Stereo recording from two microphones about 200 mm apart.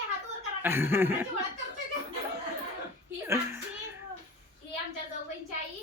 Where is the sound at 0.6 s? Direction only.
10° right (ahead or behind).